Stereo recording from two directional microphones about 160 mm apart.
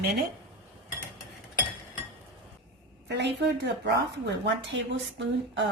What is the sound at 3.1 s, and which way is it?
Speech, 90° right.